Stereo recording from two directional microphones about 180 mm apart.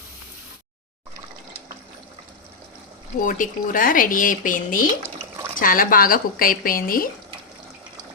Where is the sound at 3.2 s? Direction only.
50° left (ahead or behind).